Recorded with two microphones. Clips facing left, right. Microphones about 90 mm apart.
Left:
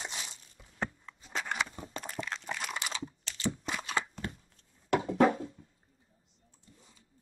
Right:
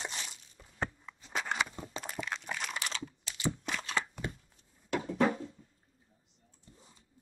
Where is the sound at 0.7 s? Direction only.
5° right (ahead or behind).